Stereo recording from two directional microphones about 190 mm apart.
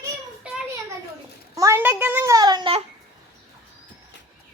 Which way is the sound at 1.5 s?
15° right (ahead or behind).